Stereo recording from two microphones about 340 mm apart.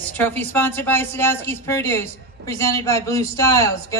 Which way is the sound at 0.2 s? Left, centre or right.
Centre.